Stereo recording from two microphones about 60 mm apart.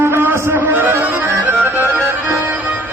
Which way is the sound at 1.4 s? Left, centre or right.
Right.